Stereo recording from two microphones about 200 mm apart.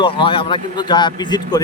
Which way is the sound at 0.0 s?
25° left (ahead or behind).